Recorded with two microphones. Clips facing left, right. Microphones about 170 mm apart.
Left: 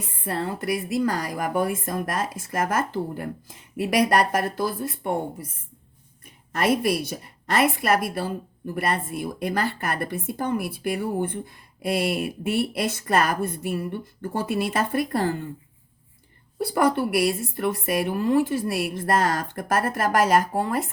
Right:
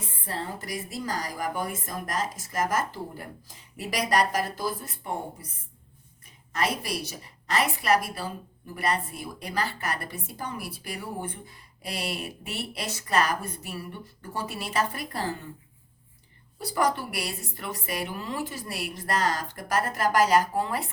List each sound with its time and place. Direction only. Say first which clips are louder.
0.3 s a woman's voice: left 8 dB; 60° left (ahead or behind)
6.5 s a woman's voice: left 7 dB; 55° left (ahead or behind)
16.6 s a woman's voice: left 5 dB; 55° left (ahead or behind)